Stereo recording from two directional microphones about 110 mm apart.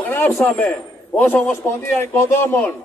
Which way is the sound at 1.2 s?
15° left (ahead or behind).